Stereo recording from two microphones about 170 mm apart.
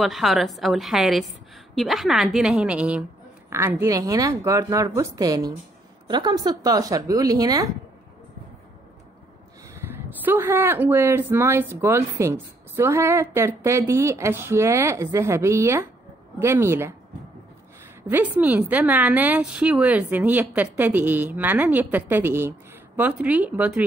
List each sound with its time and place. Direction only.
0.0 s a woman's voice: centre (ahead or behind); by 7.7 s 20° right (ahead or behind)
9.8 s speech: 10° right (ahead or behind)
18.0 s speech: 10° right (ahead or behind)